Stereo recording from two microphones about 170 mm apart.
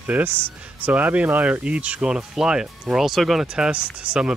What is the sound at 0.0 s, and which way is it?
Speech, 10° right (ahead or behind).